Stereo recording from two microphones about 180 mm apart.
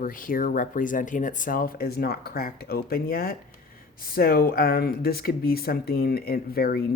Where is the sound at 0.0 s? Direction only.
50° left (ahead or behind).